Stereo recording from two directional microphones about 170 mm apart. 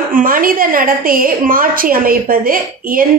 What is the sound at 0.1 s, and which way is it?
A woman's voice, 55° right (ahead or behind).